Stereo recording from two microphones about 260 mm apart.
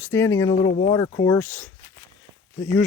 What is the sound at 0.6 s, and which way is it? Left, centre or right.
Speech, left.